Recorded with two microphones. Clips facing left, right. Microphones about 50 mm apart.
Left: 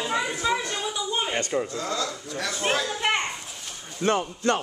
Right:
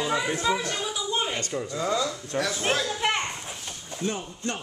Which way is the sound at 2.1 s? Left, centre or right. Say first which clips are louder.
Right 3 dB; centre.